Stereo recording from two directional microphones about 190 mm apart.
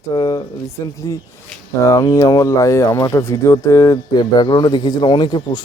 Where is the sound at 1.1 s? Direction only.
15° left (ahead or behind).